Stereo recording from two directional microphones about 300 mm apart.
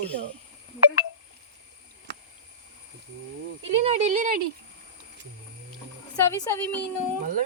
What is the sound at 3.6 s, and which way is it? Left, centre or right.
Speech, right.